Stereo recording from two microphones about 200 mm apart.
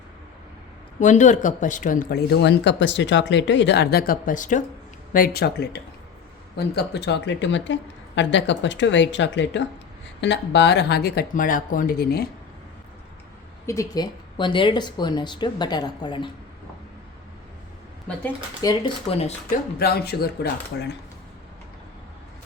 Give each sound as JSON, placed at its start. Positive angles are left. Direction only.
{"t": 0.9, "sound": "speech", "side_deg": 40}
{"t": 13.7, "sound": "speech", "side_deg": 15}
{"t": 18.6, "sound": "speech", "side_deg": 25}
{"t": 19.8, "sound": "speech", "side_deg": 50}